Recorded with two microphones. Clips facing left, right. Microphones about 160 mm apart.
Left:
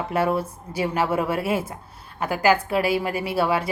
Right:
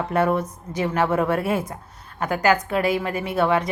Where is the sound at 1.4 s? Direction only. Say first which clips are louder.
Right 1 dB; 25° left (ahead or behind).